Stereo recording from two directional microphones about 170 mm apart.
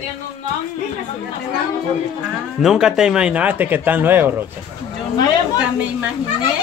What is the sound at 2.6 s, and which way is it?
Speech, centre (ahead or behind).